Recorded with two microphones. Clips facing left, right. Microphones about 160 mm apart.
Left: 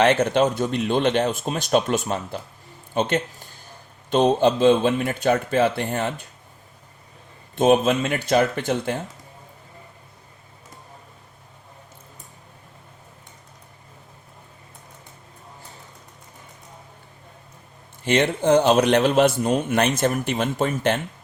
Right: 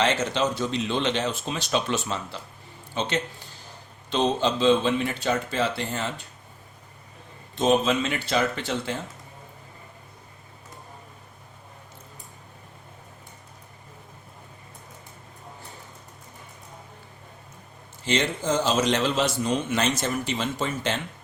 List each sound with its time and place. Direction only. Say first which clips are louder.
0.0 s a man's voice: left 6 dB; 55° left (ahead or behind)
7.5 s speech: left 4 dB; 55° left (ahead or behind)
18.0 s a man's voice: left 6 dB; 60° left (ahead or behind)